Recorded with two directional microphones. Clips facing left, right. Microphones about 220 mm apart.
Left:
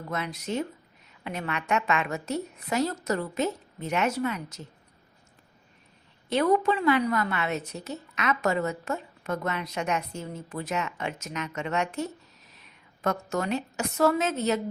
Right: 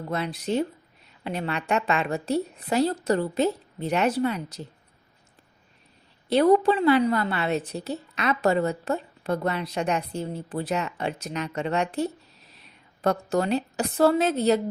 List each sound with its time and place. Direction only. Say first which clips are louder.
0.1 s a woman's voice: right 4 dB; 30° right (ahead or behind)
6.2 s a woman's voice: right 5 dB; 35° right (ahead or behind)